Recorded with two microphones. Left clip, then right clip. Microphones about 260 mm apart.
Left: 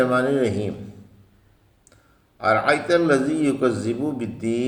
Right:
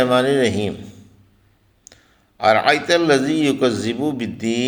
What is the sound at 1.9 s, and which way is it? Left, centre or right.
A man's voice, right.